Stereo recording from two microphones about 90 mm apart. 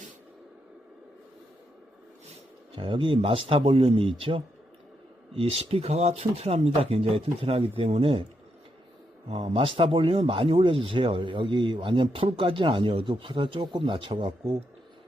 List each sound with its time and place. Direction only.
2.7 s speech: 75° right (ahead or behind); by 8.3 s 90° right
9.3 s speech: 85° right